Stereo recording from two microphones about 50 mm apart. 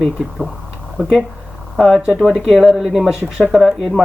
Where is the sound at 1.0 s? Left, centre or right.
Centre.